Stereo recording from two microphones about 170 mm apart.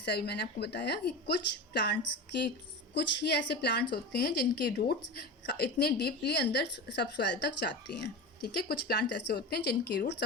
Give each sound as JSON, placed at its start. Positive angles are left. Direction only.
{"t": 0.0, "sound": "a woman's voice", "side_deg": 75}